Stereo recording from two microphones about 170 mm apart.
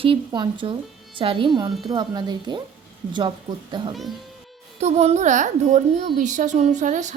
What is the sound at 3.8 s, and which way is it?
Speech, 25° right (ahead or behind).